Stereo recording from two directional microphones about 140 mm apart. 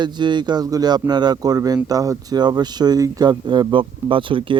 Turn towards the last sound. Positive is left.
turn(degrees=-35)  # may be behind; listen again after turning